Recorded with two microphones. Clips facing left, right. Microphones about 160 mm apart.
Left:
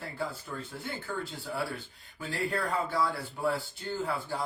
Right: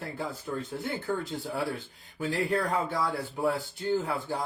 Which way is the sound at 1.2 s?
20° right (ahead or behind).